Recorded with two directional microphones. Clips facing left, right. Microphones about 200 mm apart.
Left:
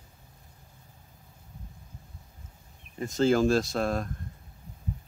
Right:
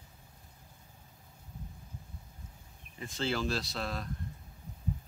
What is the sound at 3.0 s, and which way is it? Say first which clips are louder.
Speech: left 11 dB; 45° left (ahead or behind).